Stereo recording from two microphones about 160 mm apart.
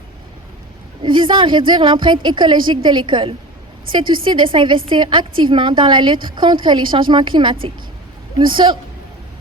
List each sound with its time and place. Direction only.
1.0 s a woman's voice: 30° right (ahead or behind)